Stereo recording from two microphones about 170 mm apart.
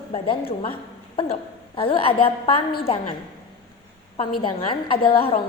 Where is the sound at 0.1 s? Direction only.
35° left (ahead or behind).